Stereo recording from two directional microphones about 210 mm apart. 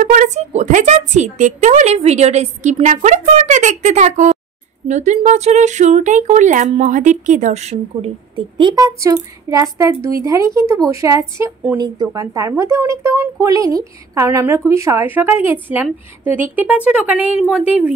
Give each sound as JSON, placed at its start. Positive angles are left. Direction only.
{"t": 0.0, "sound": "a woman's voice", "side_deg": -40}